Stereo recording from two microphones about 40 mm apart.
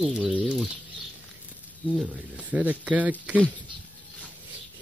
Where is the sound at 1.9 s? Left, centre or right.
Right.